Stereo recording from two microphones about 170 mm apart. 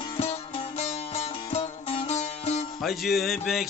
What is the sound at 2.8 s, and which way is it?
Speech, centre (ahead or behind).